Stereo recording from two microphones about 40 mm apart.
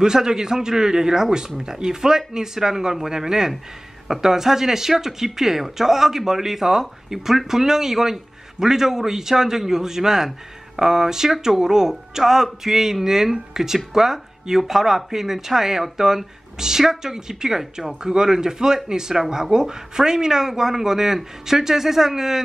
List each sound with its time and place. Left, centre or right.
0.0 s speech: centre